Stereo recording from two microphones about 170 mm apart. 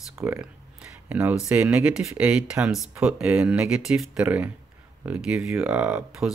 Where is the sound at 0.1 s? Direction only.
15° right (ahead or behind).